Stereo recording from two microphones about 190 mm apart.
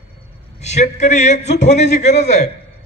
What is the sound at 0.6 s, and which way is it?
Speech, 35° left (ahead or behind).